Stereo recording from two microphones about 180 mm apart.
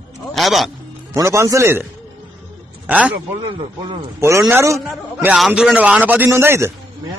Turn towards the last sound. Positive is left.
turn(degrees=-15)  # may be behind; listen again after turning